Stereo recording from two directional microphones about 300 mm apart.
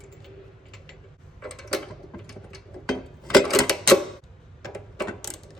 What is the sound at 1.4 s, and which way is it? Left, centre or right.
Mechanisms, centre.